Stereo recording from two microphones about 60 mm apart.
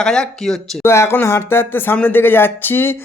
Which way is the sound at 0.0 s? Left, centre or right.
Centre.